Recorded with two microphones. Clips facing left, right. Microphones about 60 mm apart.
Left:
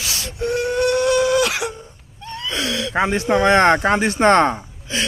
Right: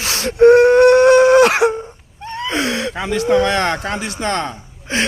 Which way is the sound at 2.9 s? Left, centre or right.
Left.